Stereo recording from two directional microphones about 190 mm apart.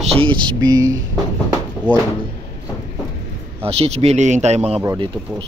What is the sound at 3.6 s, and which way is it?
Speech, 30° right (ahead or behind).